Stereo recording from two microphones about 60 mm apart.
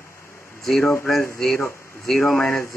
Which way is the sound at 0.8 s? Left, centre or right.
Left.